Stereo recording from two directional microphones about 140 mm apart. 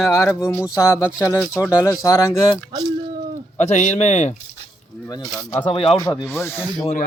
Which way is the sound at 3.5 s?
55° left (ahead or behind).